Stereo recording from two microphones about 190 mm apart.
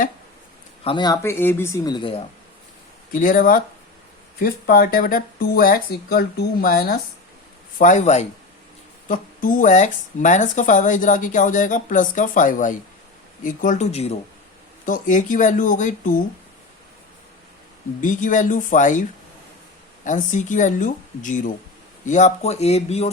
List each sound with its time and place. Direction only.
0.9 s speech: 20° left (ahead or behind)
3.1 s speech: 45° left (ahead or behind)
7.8 s speech: 40° left (ahead or behind)
18.0 s speech: 45° left (ahead or behind)
20.1 s speech: 40° left (ahead or behind)